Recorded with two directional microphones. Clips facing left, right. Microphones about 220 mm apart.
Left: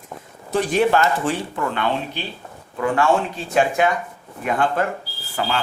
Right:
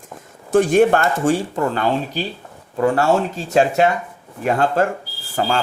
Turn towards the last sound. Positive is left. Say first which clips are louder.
# right 4 dB
turn(degrees=-45)  # may be behind; listen again after turning